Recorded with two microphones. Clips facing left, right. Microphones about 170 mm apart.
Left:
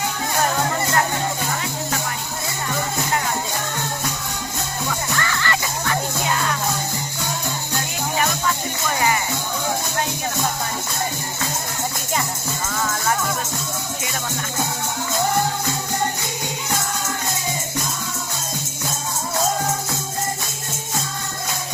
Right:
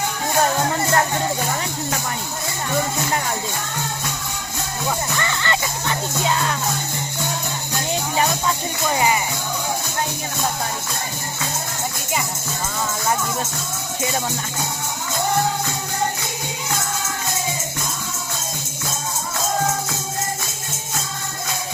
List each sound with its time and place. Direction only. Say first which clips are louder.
5.2 s music: right 1 dB; 20° right (ahead or behind)
9.0 s music: right 1 dB; 20° right (ahead or behind)